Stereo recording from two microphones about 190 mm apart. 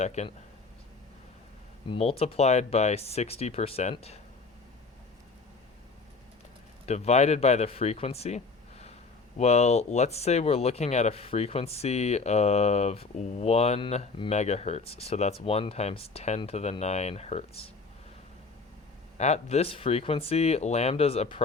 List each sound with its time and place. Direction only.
0.0 s speech: 35° left (ahead or behind)
1.9 s speech: 30° left (ahead or behind)
6.8 s speech: 35° left (ahead or behind)
9.4 s speech: 35° left (ahead or behind)
19.1 s speech: 35° left (ahead or behind)